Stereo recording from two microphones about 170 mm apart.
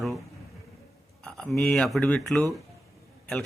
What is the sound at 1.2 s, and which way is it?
Speech, 5° left (ahead or behind).